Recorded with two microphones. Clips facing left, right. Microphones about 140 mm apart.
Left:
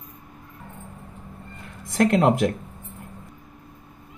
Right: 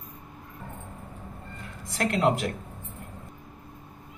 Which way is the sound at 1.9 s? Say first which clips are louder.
Left 6 dB; 50° left (ahead or behind).